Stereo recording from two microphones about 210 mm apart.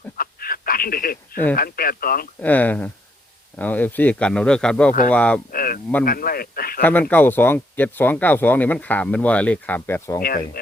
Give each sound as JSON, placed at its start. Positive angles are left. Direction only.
{"t": 0.2, "sound": "a sound", "side_deg": 45}
{"t": 1.5, "sound": "speech", "side_deg": 45}
{"t": 2.4, "sound": "speech", "side_deg": 10}
{"t": 5.5, "sound": "a sound", "side_deg": 45}
{"t": 6.1, "sound": "speech", "side_deg": 45}
{"t": 6.8, "sound": "speech", "side_deg": 10}
{"t": 10.2, "sound": "speech", "side_deg": 45}